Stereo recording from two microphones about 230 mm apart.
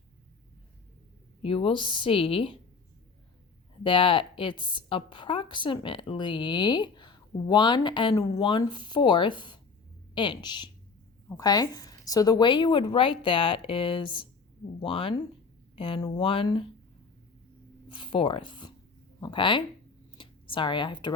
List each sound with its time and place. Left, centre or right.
1.4 s a woman's voice: left
3.8 s a woman's voice: left
17.9 s a woman's voice: left
20.1 s a sound: left